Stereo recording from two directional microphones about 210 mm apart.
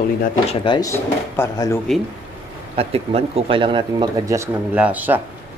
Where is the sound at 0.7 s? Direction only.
15° left (ahead or behind).